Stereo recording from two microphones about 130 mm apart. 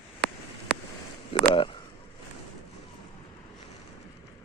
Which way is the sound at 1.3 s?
45° left (ahead or behind).